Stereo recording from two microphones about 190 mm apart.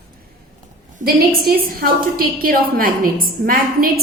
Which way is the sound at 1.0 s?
50° right (ahead or behind).